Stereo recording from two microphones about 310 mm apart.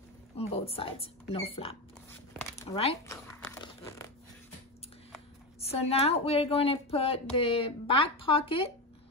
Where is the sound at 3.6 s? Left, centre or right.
Centre.